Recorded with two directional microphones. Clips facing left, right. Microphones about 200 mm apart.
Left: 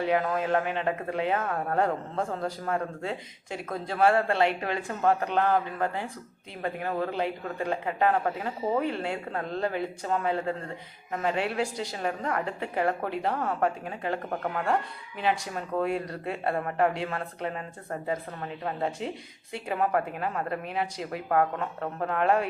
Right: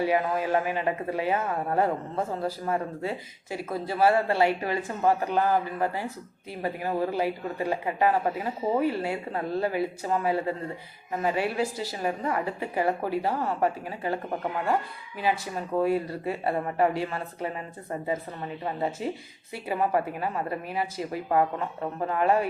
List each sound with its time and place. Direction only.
0.0 s speech: 5° right (ahead or behind)
15.2 s speech: 5° right (ahead or behind)